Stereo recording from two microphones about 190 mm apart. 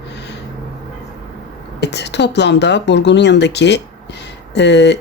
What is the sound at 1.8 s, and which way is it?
Speech, 60° left (ahead or behind).